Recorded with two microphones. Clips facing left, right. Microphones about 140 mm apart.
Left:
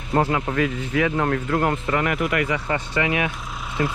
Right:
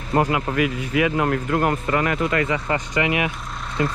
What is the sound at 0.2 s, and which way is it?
Speech, 10° right (ahead or behind).